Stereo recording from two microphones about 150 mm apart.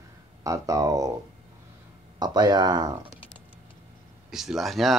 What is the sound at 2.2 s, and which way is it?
Speech, 30° right (ahead or behind).